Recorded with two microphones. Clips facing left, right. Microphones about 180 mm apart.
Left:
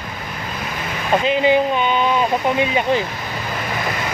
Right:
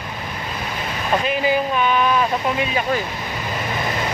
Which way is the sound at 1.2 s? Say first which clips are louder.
Left 6 dB; 25° left (ahead or behind).